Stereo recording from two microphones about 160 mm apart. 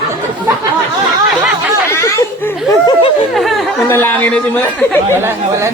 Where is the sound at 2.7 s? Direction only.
25° left (ahead or behind).